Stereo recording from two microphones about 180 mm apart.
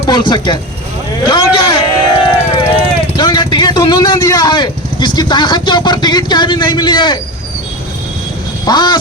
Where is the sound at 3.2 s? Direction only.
25° left (ahead or behind).